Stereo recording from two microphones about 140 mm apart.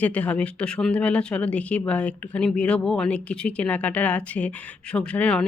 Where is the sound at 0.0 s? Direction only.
10° left (ahead or behind).